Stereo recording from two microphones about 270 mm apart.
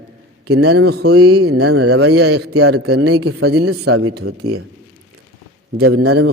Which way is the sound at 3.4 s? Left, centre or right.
Right.